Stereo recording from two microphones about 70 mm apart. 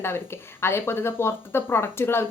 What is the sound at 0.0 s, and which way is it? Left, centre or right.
Speech, left.